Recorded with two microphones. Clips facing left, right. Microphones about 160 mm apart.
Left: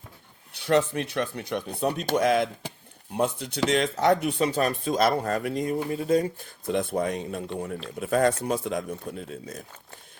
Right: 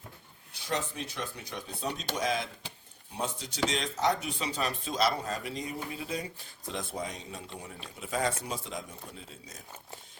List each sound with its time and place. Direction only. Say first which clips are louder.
0.5 s speech: left 11 dB; 65° left (ahead or behind)